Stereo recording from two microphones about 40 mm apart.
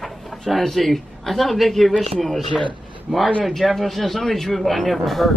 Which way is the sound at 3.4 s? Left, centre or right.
Centre.